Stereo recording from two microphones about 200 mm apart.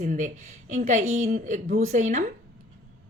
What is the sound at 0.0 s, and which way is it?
A woman's voice, 40° right (ahead or behind).